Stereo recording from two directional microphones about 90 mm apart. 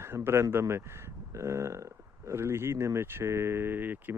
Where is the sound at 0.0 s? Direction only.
30° right (ahead or behind).